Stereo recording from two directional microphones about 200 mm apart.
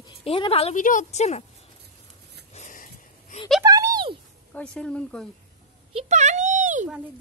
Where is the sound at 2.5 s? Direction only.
40° left (ahead or behind).